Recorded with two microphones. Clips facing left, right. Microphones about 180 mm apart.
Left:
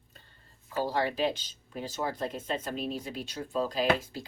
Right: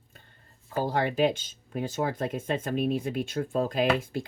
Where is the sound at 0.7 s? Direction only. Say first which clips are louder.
Right 3 dB; 50° right (ahead or behind).